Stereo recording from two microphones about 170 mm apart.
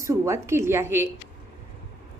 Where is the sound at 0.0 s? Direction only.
15° right (ahead or behind).